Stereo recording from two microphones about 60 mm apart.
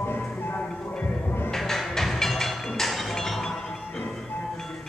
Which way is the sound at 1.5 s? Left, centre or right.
Centre.